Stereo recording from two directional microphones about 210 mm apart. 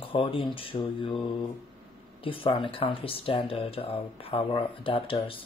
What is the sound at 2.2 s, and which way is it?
Speech, 25° left (ahead or behind).